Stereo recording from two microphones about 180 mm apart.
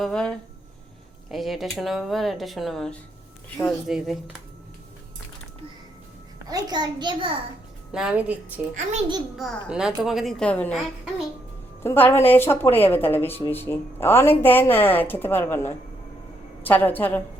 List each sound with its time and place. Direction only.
0.0 s speech: 5° left (ahead or behind)
6.5 s a child's voice: 25° right (ahead or behind)
7.9 s a woman's voice: 5° right (ahead or behind)
8.7 s a child's voice: 40° right (ahead or behind)
9.4 s a woman's voice: centre (ahead or behind)